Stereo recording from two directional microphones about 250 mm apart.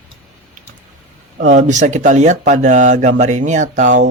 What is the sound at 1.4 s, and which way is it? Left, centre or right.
Speech, right.